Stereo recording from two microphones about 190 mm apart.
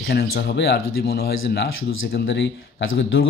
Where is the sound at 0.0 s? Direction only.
55° left (ahead or behind).